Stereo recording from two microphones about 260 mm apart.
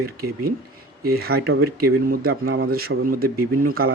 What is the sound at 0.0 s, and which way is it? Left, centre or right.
Speech, right.